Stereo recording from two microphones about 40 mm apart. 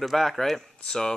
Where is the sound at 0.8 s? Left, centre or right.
Centre.